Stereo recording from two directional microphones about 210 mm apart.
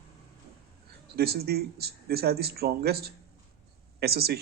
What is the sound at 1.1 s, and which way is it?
A man's voice, 50° right (ahead or behind).